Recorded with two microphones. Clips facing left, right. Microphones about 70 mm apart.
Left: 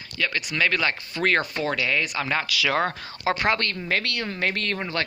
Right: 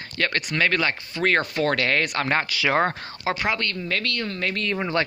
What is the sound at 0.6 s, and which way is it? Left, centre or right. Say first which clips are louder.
Speech: right 1 dB; right.